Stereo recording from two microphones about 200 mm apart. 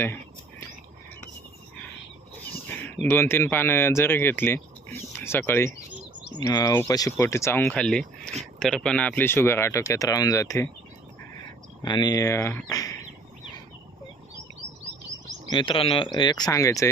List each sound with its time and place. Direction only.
3.1 s speech: 10° left (ahead or behind)
11.8 s speech: 20° left (ahead or behind)
15.4 s speech: 25° left (ahead or behind)